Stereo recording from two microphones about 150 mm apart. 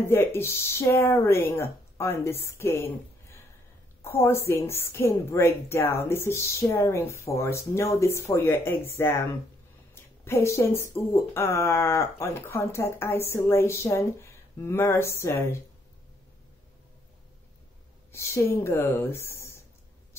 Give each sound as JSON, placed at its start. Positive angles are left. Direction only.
{"t": 0.0, "sound": "speech", "side_deg": 15}
{"t": 4.0, "sound": "speech", "side_deg": 15}
{"t": 18.1, "sound": "speech", "side_deg": 20}